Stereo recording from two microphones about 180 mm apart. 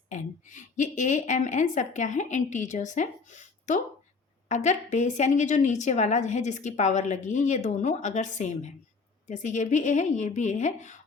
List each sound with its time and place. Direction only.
0.1 s a woman's voice: 45° left (ahead or behind)